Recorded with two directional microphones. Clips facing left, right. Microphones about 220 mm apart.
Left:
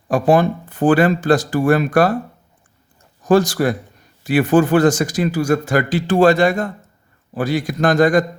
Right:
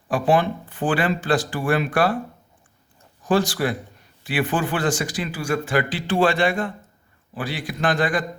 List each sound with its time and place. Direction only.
0.1 s speech: 45° left (ahead or behind)
3.2 s speech: 45° left (ahead or behind)